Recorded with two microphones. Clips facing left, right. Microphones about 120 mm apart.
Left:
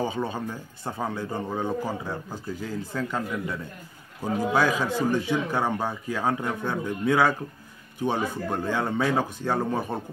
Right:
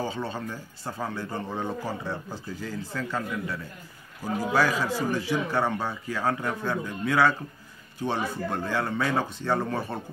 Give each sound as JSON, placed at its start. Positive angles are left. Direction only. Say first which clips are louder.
{"t": 0.0, "sound": "speech", "louder": "left 3 dB", "side_deg": 15}